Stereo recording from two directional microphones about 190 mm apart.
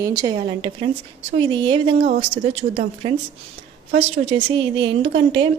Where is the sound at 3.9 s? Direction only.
35° right (ahead or behind).